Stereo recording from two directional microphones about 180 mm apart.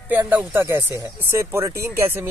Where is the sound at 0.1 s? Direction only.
10° right (ahead or behind).